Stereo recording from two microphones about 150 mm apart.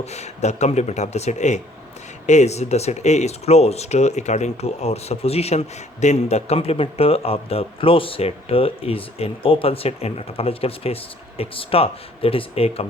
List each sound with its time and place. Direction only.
0.0 s speech: 45° left (ahead or behind)